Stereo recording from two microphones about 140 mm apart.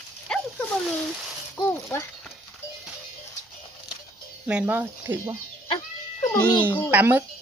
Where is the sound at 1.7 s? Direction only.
20° left (ahead or behind).